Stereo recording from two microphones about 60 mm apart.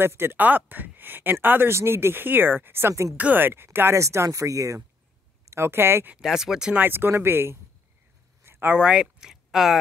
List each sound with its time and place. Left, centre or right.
0.0 s speech: right
0.4 s speech: right
1.7 s speech: right
2.9 s speech: right
3.2 s speech: right
3.4 s speech: right
4.0 s speech: right
5.5 s speech: right
6.1 s speech: centre
6.7 s speech: right
8.5 s a sound: right
8.7 s speech: centre